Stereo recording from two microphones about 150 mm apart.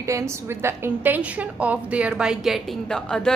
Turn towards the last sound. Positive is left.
turn(degrees=5)  # may be behind; listen again after turning